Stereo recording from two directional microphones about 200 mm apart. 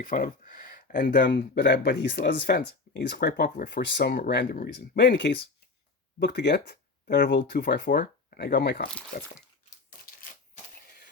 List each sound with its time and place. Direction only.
0.0 s speech: 45° left (ahead or behind)